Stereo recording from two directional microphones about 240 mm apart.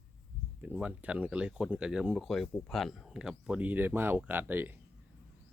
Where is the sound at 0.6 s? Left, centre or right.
Centre.